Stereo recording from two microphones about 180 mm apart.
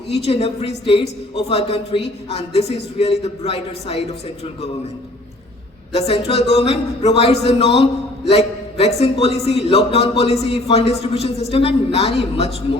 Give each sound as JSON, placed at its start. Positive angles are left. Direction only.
{"t": 0.1, "sound": "a man's voice", "side_deg": 35}
{"t": 5.9, "sound": "a man's voice", "side_deg": 35}